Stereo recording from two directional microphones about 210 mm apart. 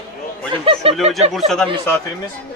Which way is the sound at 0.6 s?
25° right (ahead or behind).